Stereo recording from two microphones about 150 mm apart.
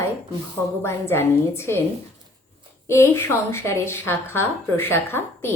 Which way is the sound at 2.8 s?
15° left (ahead or behind).